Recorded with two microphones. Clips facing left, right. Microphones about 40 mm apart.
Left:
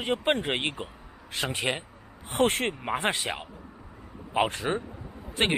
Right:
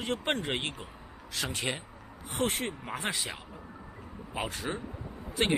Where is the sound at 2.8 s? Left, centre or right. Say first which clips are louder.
Left 6 dB; left.